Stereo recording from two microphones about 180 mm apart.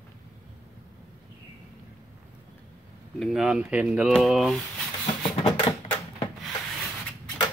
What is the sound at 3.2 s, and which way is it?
Speech, centre (ahead or behind).